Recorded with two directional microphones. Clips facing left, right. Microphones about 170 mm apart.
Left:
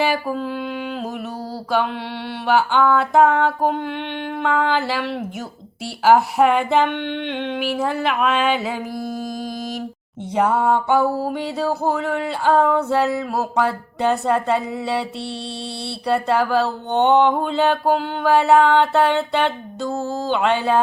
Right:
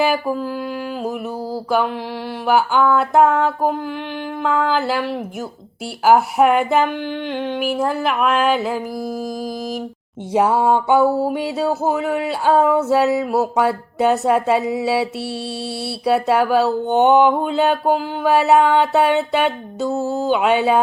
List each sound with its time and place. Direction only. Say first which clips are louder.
0.0 s speech: right 2 dB; 5° right (ahead or behind)
2.5 s speech: right 1 dB; 5° right (ahead or behind)
6.1 s speech: right 1 dB; centre (ahead or behind)
10.3 s music: right 2 dB; 10° right (ahead or behind)
11.2 s speech: right 3 dB; 5° right (ahead or behind)
14.8 s music: right 4 dB; 5° right (ahead or behind)
16.0 s speech: right 3 dB; 5° right (ahead or behind)